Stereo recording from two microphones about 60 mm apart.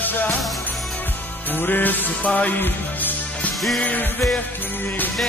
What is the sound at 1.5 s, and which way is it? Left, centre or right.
Music, left.